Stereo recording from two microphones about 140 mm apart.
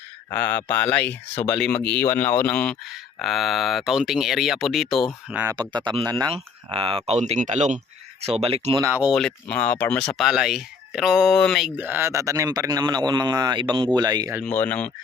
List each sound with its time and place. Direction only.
0.3 s speech: 10° left (ahead or behind)
5.3 s speech: 15° right (ahead or behind)
5.5 s speech: 30° right (ahead or behind)
6.3 s speech: 40° right (ahead or behind)
7.1 s speech: 50° right (ahead or behind)
8.2 s speech: 45° right (ahead or behind)
9.0 s speech: centre (ahead or behind)
11.8 s speech: 15° right (ahead or behind)
14.4 s speech: 10° left (ahead or behind)